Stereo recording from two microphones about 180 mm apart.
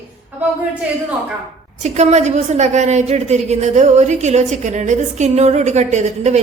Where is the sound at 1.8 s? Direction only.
40° right (ahead or behind).